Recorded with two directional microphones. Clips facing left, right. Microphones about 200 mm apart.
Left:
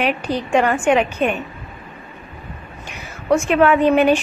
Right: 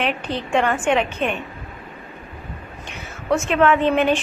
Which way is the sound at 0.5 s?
10° left (ahead or behind).